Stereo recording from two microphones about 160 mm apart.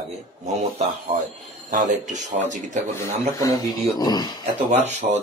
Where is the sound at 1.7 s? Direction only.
55° right (ahead or behind).